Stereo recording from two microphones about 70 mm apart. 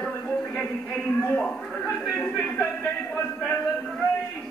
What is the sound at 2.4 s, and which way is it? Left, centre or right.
Speech, centre.